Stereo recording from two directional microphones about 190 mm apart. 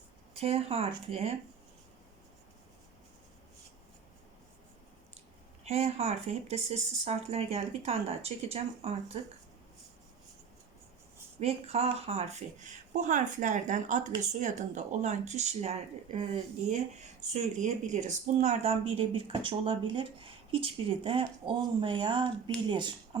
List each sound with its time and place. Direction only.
0.3 s speech: 30° right (ahead or behind)
5.6 s speech: 35° right (ahead or behind)
11.3 s speech: 35° right (ahead or behind)